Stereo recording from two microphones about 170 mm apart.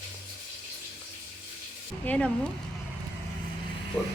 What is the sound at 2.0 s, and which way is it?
Speech, 10° left (ahead or behind).